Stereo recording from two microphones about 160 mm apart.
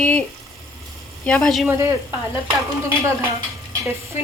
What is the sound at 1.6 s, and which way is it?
Speech, 15° right (ahead or behind).